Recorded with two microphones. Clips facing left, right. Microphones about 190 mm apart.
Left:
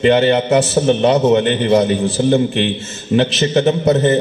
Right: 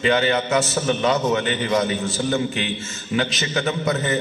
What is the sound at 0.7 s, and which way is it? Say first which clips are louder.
A man's voice: left 8 dB; 30° left (ahead or behind).